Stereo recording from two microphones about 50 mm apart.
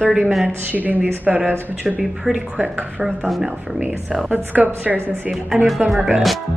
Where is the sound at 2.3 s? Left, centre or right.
Centre.